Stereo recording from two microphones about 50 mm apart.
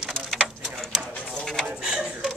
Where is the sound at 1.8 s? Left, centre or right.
Centre.